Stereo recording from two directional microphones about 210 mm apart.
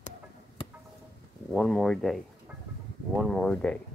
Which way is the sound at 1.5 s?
Centre (ahead or behind).